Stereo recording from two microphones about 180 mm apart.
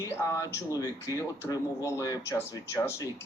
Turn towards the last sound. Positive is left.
turn(degrees=15)  # may be behind; listen again after turning